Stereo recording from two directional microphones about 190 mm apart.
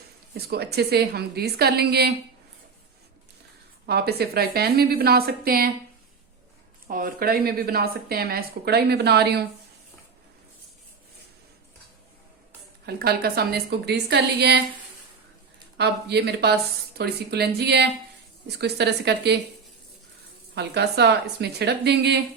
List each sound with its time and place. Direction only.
0.3 s a woman's voice: 55° right (ahead or behind)
3.8 s a woman's voice: 55° right (ahead or behind)
6.8 s a woman's voice: 50° right (ahead or behind)
12.8 s a woman's voice: 55° right (ahead or behind)
15.8 s a woman's voice: 60° right (ahead or behind)
20.6 s a woman's voice: 60° right (ahead or behind)